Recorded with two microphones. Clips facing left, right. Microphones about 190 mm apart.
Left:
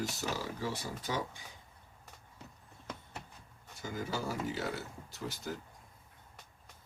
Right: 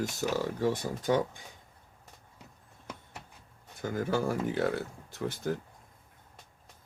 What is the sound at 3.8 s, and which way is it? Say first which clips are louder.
Speech: right 8 dB; 55° right (ahead or behind).